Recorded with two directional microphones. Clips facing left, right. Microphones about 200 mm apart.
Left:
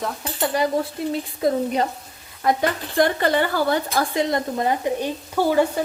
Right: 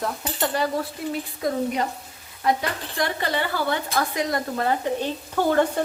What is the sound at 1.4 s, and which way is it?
Frying, 25° left (ahead or behind).